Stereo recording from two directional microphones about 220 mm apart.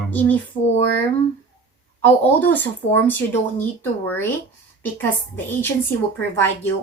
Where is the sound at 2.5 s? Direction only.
10° left (ahead or behind).